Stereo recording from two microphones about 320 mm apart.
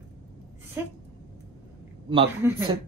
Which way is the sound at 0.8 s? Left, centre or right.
Centre.